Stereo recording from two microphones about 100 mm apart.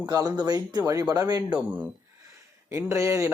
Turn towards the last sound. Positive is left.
turn(degrees=-30)  # may be behind; listen again after turning